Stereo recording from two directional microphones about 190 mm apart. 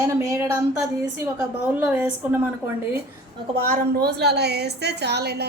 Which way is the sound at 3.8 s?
60° right (ahead or behind).